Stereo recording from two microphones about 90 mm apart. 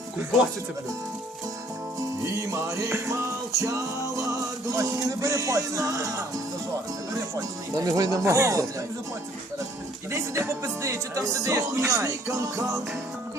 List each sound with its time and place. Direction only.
2.2 s speech: 30° right (ahead or behind)
7.3 s speech: 40° right (ahead or behind)
10.1 s speech: 35° right (ahead or behind)